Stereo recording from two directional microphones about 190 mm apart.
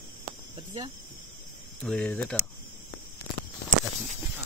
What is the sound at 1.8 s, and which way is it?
Speech, 5° left (ahead or behind).